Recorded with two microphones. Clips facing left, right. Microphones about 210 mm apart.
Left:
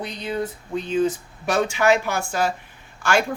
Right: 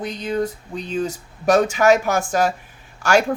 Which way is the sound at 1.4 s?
45° right (ahead or behind).